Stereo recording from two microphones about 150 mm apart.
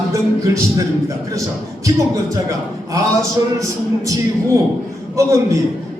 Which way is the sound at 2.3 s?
20° right (ahead or behind).